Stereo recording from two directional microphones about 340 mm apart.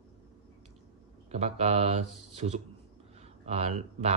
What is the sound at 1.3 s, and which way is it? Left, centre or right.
Speech, centre.